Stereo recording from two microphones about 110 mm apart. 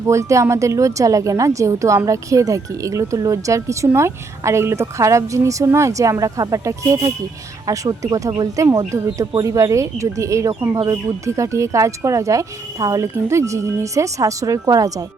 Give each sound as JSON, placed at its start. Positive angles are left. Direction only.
{"t": 0.1, "sound": "a woman's voice", "side_deg": -25}